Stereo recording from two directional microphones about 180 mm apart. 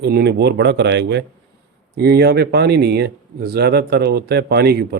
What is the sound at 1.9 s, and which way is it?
A man's voice, 60° right (ahead or behind).